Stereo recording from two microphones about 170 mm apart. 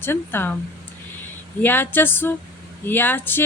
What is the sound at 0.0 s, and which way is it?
Speech, 15° left (ahead or behind).